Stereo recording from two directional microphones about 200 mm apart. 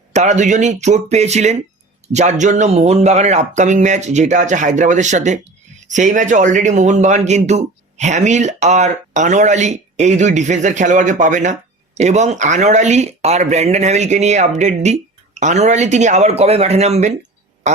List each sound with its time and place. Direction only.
0.1 s speech: 35° right (ahead or behind)